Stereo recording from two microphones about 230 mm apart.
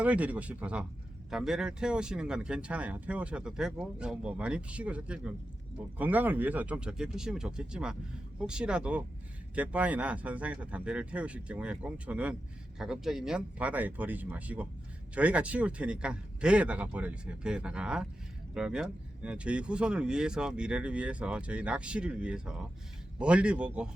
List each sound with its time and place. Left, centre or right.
0.0 s speech: centre